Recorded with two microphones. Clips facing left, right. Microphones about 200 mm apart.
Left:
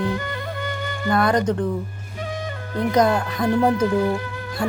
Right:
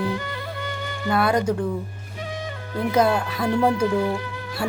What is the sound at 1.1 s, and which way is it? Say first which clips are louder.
Speech: left 1 dB; 5° right (ahead or behind).